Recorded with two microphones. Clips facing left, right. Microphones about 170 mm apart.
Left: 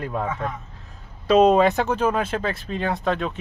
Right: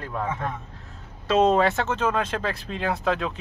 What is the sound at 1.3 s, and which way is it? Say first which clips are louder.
Speech: left 4 dB; 15° left (ahead or behind).